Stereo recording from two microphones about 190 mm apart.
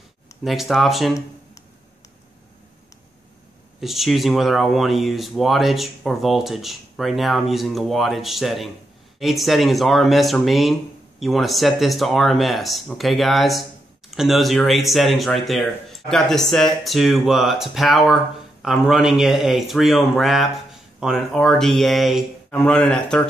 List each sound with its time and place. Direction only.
0.4 s speech: centre (ahead or behind)
3.8 s speech: centre (ahead or behind)